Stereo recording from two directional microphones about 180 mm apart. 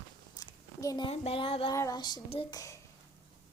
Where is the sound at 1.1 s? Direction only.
30° left (ahead or behind).